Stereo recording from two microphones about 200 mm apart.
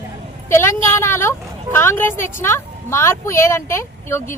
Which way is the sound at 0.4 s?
15° left (ahead or behind).